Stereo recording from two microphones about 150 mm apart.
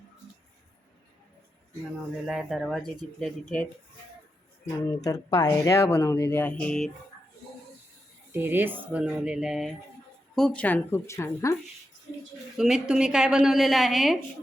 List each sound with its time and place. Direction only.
2.2 s a woman's voice: 5° right (ahead or behind)
5.0 s speech: 25° left (ahead or behind); by 6.9 s 5° left (ahead or behind)
8.3 s speech: 15° right (ahead or behind); by 11.5 s 20° left (ahead or behind)
12.5 s a woman's voice: 5° right (ahead or behind)